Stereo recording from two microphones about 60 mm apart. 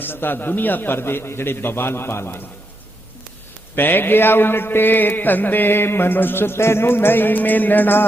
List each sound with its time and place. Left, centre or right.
0.0 s a man's voice: left
3.8 s a man's voice: left